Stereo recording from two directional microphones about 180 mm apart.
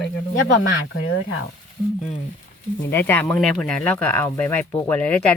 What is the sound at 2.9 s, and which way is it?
Speech, 10° left (ahead or behind).